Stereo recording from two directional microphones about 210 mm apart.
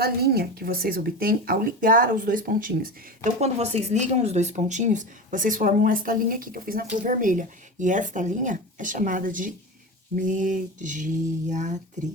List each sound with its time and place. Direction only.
0.0 s speech: 50° right (ahead or behind)